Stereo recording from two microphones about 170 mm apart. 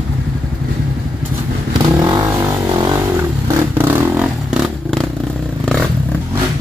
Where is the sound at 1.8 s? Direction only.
25° right (ahead or behind).